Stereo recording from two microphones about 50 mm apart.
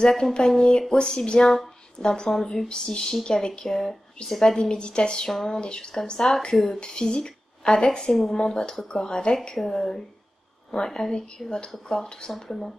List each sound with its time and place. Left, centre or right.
0.1 s a woman's voice: centre
5.6 s a woman's voice: centre
8.1 s speech: centre
8.4 s a woman's voice: centre
12.3 s speech: centre